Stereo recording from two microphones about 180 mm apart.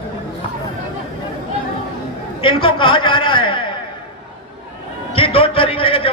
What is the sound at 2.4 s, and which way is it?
A man's voice, 30° left (ahead or behind).